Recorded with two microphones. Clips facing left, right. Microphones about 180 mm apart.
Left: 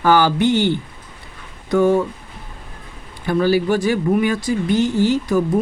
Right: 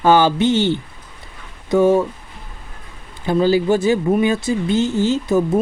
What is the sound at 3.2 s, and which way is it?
Speech, 20° right (ahead or behind).